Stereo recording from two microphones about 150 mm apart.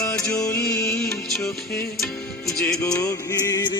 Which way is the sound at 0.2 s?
20° left (ahead or behind).